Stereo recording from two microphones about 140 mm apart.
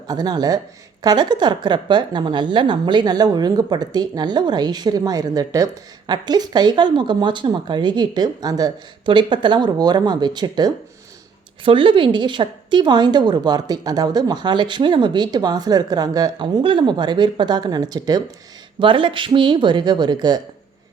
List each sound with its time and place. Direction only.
0.1 s a woman's voice: 30° right (ahead or behind)